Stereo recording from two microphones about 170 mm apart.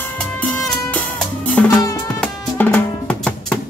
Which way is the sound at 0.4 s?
5° left (ahead or behind).